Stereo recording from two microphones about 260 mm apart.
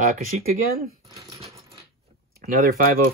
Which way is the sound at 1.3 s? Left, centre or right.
Centre.